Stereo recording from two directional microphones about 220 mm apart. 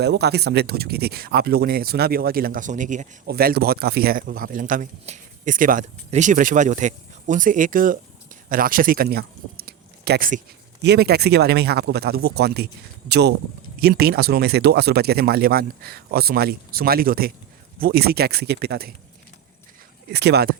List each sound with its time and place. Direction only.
0.0 s speech: 50° right (ahead or behind)
20.1 s speech: 50° right (ahead or behind)